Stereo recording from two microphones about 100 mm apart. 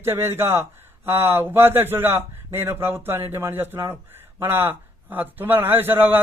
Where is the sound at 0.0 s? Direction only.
25° right (ahead or behind).